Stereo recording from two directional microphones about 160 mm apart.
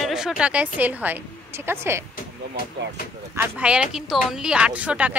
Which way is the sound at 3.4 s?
10° right (ahead or behind).